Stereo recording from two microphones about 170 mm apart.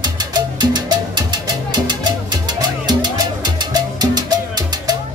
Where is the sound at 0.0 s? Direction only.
25° right (ahead or behind).